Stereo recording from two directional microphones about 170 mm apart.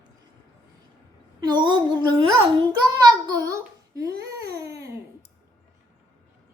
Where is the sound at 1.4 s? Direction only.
25° right (ahead or behind).